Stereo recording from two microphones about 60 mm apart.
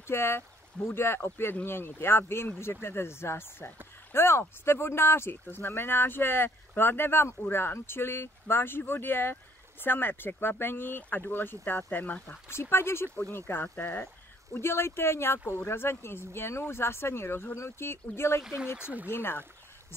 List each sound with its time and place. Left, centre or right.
0.0 s speech: left
12.4 s speech: left
14.5 s speech: left
18.4 s speech: centre
19.0 s speech: left